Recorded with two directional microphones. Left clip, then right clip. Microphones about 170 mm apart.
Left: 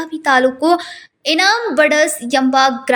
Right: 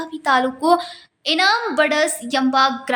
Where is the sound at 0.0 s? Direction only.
15° left (ahead or behind).